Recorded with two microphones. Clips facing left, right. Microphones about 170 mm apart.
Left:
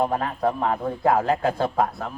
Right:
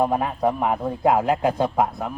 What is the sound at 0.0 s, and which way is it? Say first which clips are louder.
A man's voice: right 2 dB; 15° right (ahead or behind).